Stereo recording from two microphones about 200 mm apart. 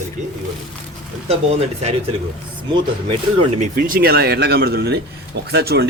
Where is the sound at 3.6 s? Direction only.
45° right (ahead or behind).